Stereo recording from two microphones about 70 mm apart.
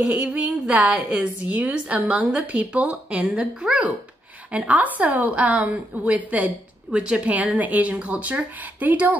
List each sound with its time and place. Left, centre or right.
0.0 s a woman's voice: right